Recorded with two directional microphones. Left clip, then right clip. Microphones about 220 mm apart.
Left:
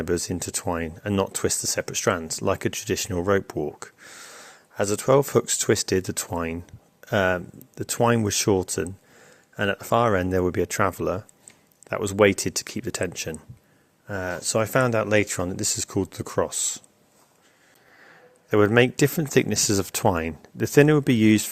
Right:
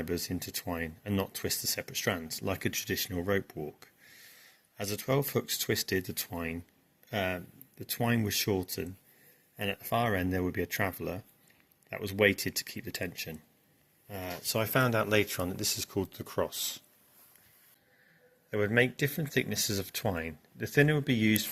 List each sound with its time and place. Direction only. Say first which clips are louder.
0.0 s speech: left 9 dB; 55° left (ahead or behind)
18.5 s speech: left 9 dB; 50° left (ahead or behind)